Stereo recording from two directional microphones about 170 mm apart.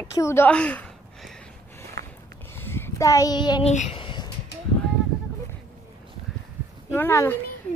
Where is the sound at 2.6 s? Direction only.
15° left (ahead or behind).